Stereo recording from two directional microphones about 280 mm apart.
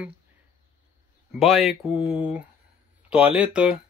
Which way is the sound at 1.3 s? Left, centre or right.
Centre.